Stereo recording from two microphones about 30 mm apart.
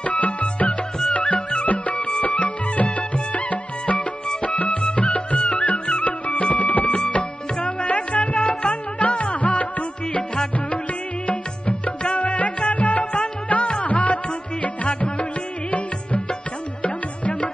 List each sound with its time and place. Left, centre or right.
0.0 s music: left
7.1 s music: left
11.2 s music: left
16.8 s music: left